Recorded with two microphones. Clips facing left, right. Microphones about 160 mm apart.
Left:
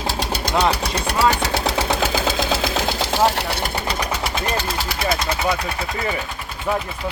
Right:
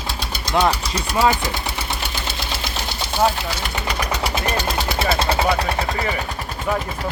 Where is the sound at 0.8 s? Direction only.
65° left (ahead or behind); by 3.6 s 80° left.